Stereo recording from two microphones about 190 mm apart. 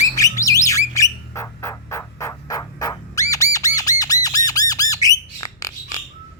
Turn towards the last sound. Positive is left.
turn(degrees=20)  # may be behind; listen again after turning